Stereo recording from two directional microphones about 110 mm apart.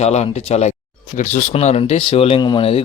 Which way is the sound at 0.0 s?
80° left.